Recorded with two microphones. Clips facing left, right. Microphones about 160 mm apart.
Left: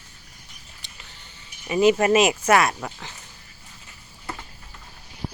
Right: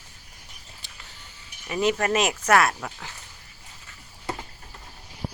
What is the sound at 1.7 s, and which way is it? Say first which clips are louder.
Speech: left 6 dB; 5° left (ahead or behind).